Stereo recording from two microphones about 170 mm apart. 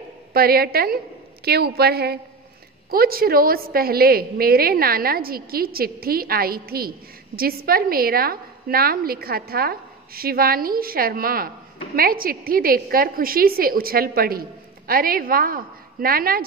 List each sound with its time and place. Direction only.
0.3 s a woman's voice: 65° right (ahead or behind)